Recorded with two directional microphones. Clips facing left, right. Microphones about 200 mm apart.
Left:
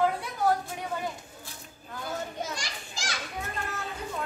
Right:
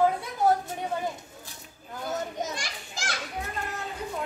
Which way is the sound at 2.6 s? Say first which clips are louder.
Right 1 dB; 55° right (ahead or behind).